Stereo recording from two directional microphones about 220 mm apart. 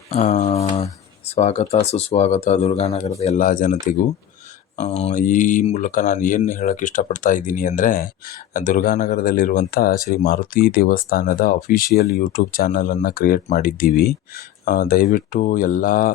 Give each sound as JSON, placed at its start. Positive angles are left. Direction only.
{"t": 0.1, "sound": "a sound", "side_deg": 30}
{"t": 1.4, "sound": "speech", "side_deg": 30}
{"t": 4.8, "sound": "speech", "side_deg": 30}